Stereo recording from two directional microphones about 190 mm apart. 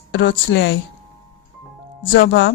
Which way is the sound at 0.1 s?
70° left (ahead or behind).